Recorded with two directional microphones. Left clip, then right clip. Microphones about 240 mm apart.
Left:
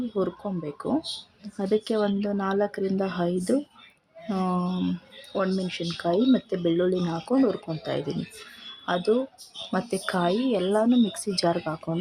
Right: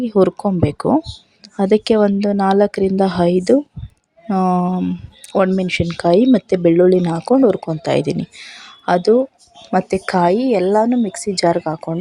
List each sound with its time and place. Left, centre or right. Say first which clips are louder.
0.1 s speech: right 17 dB; right